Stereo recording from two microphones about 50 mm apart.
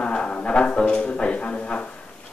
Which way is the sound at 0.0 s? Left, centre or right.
Centre.